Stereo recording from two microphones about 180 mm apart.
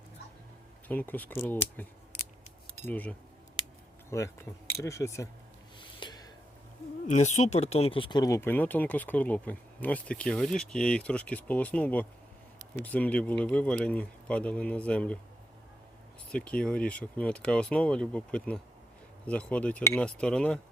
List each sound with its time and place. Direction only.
0.9 s speech: 10° left (ahead or behind)
5.8 s a sound: 25° left (ahead or behind)
7.1 s speech: 40° left (ahead or behind); by 15.2 s 5° left (ahead or behind)
16.3 s speech: 5° left (ahead or behind)